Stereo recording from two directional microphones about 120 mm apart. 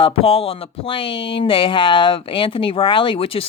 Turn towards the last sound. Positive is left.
turn(degrees=50)  # may be behind; listen again after turning